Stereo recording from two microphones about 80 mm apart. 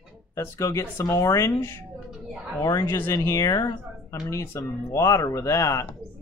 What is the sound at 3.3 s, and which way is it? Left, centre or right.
Speech, left.